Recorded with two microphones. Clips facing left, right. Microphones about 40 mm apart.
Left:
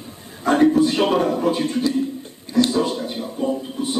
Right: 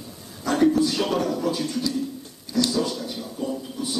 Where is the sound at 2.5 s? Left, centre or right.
Left.